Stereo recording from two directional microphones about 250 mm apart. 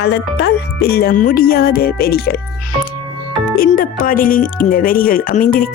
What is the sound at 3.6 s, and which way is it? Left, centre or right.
Speech, left.